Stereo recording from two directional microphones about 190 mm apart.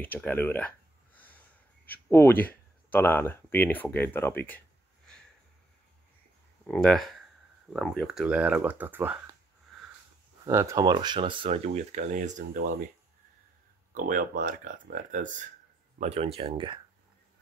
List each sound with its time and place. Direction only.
0.0 s a sound: 10° left (ahead or behind)
1.9 s speech: 15° left (ahead or behind)
6.6 s speech: 5° left (ahead or behind)
10.4 s speech: 15° right (ahead or behind); by 12.7 s 45° right (ahead or behind)
13.9 s speech: 45° right (ahead or behind); by 16.8 s 25° right (ahead or behind)